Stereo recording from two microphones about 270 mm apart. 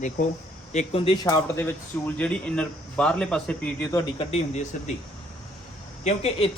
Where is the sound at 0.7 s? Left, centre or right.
Left.